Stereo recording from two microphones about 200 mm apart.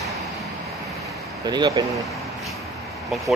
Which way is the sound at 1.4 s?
20° right (ahead or behind).